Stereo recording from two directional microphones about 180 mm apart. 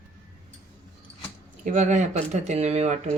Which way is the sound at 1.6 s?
45° right (ahead or behind).